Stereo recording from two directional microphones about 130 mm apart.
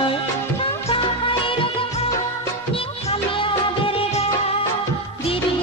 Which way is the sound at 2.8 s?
45° left (ahead or behind).